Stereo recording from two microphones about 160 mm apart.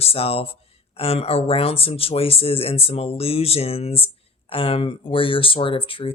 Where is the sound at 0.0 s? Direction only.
35° left (ahead or behind).